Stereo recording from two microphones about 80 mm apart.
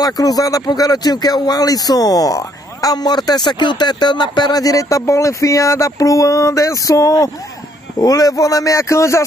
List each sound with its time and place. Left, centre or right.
0.0 s speech: left